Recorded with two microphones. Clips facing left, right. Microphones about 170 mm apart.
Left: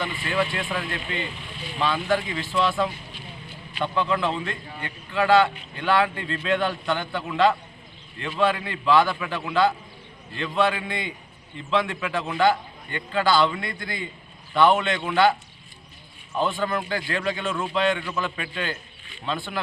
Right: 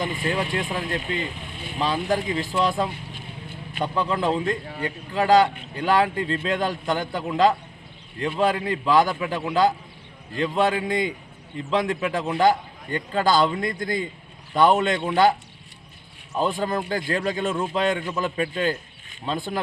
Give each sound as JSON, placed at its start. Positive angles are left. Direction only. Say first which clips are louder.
{"t": 0.0, "sound": "speech", "louder": "right 1 dB", "side_deg": -40}
{"t": 16.4, "sound": "speech", "louder": "right 1 dB", "side_deg": -40}